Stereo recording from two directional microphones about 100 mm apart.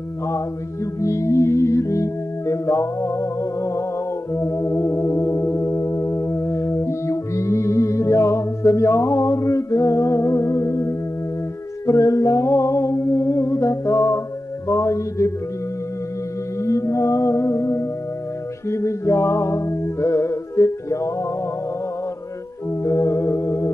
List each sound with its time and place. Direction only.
1.0 s music: 30° left (ahead or behind)
14.7 s mantra: 30° left (ahead or behind)
16.6 s music: 30° left (ahead or behind)
22.8 s music: 30° left (ahead or behind)